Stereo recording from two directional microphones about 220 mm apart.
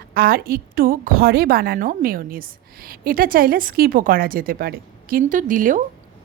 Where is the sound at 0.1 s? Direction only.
45° right (ahead or behind).